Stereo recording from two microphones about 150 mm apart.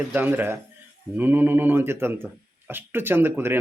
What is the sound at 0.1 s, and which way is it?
A man's voice, 10° right (ahead or behind).